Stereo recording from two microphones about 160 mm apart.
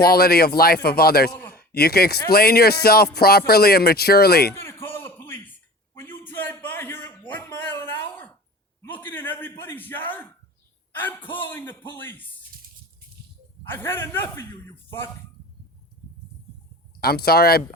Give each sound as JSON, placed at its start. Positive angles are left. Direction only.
{"t": 0.0, "sound": "speech", "side_deg": 70}
{"t": 4.5, "sound": "a sound", "side_deg": 15}
{"t": 10.9, "sound": "a man's voice", "side_deg": 10}
{"t": 13.7, "sound": "a man's voice", "side_deg": 15}
{"t": 17.0, "sound": "speech", "side_deg": 75}